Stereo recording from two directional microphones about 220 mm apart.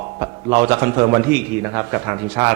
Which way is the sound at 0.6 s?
20° right (ahead or behind).